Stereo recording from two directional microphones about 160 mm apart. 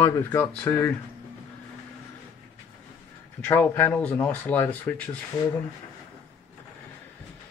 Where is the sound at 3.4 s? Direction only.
10° left (ahead or behind).